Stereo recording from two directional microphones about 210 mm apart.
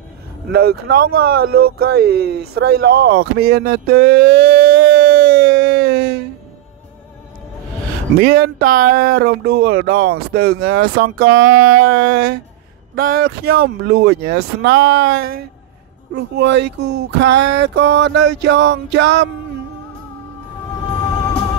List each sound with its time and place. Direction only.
0.5 s speech: 50° right (ahead or behind)
8.2 s speech: 45° right (ahead or behind)